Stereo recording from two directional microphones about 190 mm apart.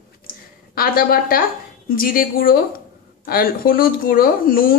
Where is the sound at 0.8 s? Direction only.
50° left (ahead or behind).